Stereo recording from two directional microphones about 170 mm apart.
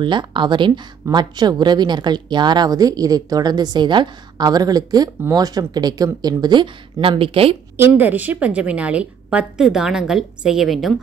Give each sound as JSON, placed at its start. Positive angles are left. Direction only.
{"t": 0.0, "sound": "a woman's voice", "side_deg": -25}
{"t": 7.7, "sound": "a woman's voice", "side_deg": -10}